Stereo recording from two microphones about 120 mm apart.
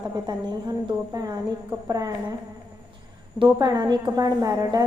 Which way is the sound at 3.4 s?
35° right (ahead or behind).